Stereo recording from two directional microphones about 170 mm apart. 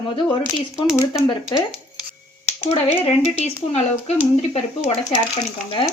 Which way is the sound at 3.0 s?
40° left (ahead or behind).